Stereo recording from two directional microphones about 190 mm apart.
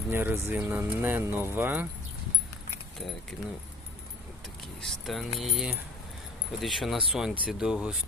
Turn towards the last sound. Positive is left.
turn(degrees=-5)  # may be behind; listen again after turning